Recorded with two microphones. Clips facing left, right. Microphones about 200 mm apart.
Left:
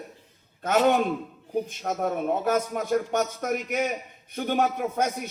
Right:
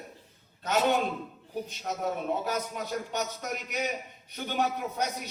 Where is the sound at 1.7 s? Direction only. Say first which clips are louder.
Left 4 dB; 50° left (ahead or behind).